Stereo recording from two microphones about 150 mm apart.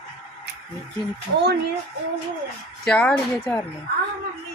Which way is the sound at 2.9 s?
5° left (ahead or behind).